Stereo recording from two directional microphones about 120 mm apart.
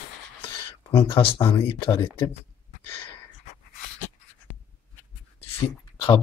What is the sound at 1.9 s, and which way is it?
Speech, 25° left (ahead or behind).